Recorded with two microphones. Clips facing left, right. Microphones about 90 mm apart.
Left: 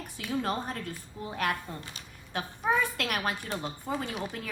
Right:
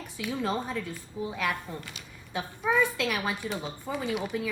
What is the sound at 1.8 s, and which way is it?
Speech, 35° left (ahead or behind).